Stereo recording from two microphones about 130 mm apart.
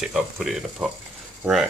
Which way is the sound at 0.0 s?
5° right (ahead or behind).